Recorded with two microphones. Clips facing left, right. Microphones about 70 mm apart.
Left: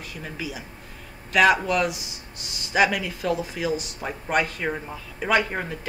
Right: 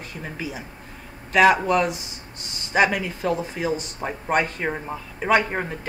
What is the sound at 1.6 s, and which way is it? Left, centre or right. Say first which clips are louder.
Speech: right 3 dB; right.